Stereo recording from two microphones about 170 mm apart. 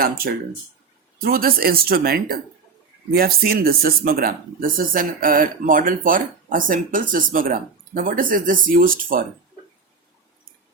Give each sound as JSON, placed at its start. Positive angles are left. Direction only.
{"t": 0.0, "sound": "speech", "side_deg": -60}